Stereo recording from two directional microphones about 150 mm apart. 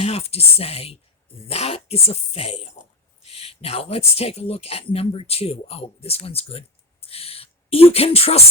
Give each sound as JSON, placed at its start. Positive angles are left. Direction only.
{"t": 0.0, "sound": "speech", "side_deg": 40}